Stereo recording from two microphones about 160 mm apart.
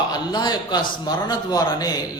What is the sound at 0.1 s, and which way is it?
A man's voice, 25° left (ahead or behind).